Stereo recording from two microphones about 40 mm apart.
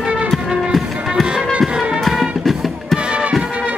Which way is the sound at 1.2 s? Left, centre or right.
Right.